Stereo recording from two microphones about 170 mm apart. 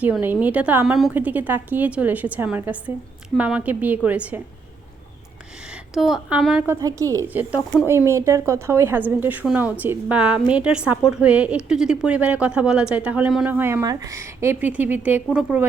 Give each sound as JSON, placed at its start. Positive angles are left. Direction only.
{"t": 0.0, "sound": "a woman's voice", "side_deg": -10}
{"t": 5.7, "sound": "a woman's voice", "side_deg": 0}
{"t": 6.7, "sound": "a woman's voice", "side_deg": -15}